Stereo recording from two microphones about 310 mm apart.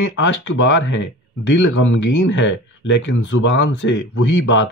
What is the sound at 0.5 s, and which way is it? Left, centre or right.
Speech, left.